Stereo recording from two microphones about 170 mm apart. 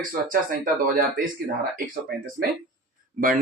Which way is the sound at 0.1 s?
55° right (ahead or behind).